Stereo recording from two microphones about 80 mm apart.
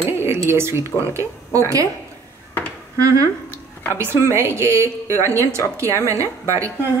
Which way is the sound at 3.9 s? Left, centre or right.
Right.